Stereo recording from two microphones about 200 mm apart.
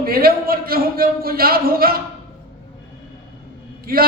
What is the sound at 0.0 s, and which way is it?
A man's voice, 50° right (ahead or behind).